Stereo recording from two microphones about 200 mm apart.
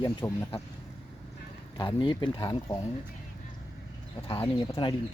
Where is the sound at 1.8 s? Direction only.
25° left (ahead or behind).